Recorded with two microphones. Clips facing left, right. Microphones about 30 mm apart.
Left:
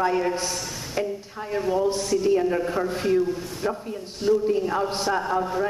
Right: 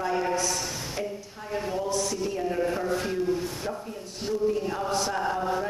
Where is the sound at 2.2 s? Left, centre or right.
Centre.